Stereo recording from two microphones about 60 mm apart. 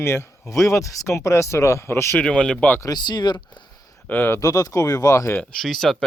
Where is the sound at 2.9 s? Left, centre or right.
Left.